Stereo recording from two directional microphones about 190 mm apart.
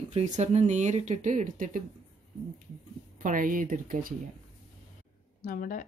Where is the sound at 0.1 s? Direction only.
35° right (ahead or behind).